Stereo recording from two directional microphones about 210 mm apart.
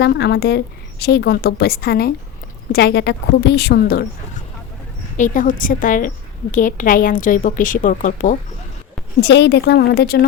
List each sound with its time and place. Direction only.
0.0 s a woman's voice: 55° left (ahead or behind)
5.1 s a woman's voice: 40° left (ahead or behind)
9.2 s a woman's voice: 55° left (ahead or behind)